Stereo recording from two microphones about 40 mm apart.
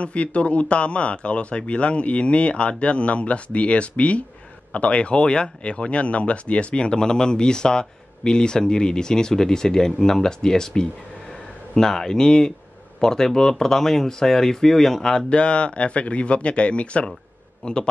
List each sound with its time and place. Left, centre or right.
0.0 s a man's voice: left; by 15.2 s centre
15.2 s speech: left